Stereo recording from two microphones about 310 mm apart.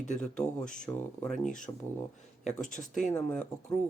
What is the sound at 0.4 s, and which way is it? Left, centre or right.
Speech, left.